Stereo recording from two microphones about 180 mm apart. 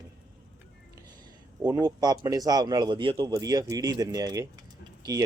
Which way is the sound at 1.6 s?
20° right (ahead or behind).